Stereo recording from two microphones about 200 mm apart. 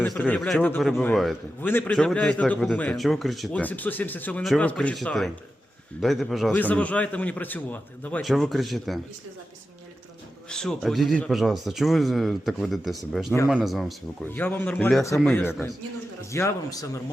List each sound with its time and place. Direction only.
0.0 s a man's voice: 10° left (ahead or behind)
10.5 s a man's voice: 5° left (ahead or behind)